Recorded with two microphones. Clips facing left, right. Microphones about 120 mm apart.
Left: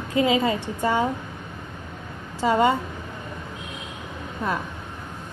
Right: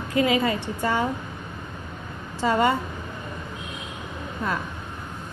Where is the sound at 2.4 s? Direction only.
20° left (ahead or behind).